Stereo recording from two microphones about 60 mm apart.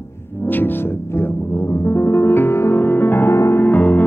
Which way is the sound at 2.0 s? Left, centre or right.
Left.